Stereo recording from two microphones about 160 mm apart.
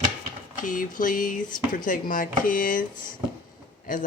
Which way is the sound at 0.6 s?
55° left (ahead or behind).